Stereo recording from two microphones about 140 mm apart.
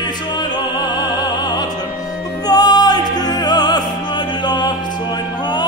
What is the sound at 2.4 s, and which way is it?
Music, 30° left (ahead or behind).